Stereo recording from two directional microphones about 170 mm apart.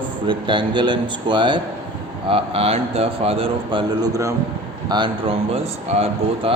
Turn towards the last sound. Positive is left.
turn(degrees=-35)  # may be behind; listen again after turning